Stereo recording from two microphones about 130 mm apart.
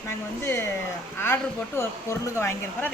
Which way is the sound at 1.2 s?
20° left (ahead or behind).